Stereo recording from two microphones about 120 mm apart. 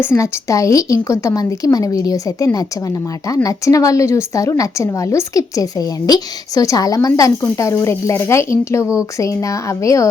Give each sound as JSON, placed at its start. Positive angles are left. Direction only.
{"t": 0.0, "sound": "a woman's voice", "side_deg": 20}